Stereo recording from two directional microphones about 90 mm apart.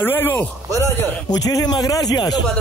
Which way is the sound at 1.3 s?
45° left (ahead or behind).